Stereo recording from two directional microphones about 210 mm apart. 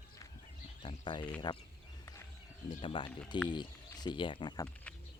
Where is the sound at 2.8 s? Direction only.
25° left (ahead or behind).